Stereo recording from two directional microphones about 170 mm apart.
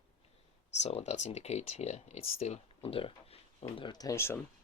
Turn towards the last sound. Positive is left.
turn(degrees=15)  # may be behind; listen again after turning